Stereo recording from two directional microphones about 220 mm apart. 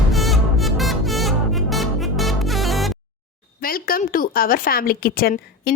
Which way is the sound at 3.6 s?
40° left (ahead or behind).